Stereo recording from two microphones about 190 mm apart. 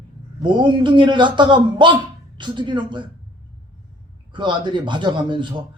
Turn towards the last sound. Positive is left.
turn(degrees=-25)  # may be behind; listen again after turning